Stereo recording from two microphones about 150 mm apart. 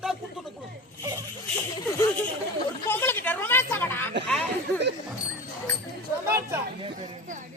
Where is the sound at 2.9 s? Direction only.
15° left (ahead or behind).